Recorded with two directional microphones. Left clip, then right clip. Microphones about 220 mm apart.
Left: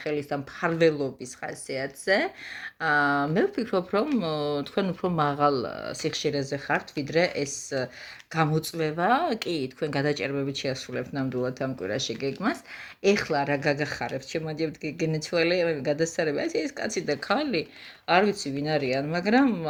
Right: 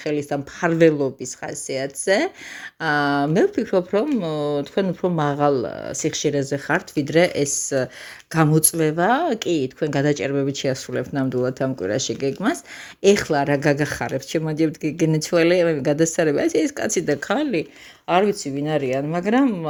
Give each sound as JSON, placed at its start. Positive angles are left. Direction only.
{"t": 0.0, "sound": "speech", "side_deg": -40}
{"t": 6.4, "sound": "speech", "side_deg": -55}
{"t": 17.2, "sound": "speech", "side_deg": -35}